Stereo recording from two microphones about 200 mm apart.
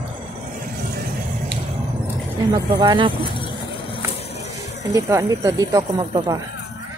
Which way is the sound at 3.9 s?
30° left (ahead or behind).